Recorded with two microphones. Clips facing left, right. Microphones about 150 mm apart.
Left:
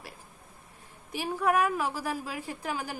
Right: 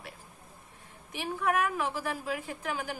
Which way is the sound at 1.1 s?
40° left (ahead or behind).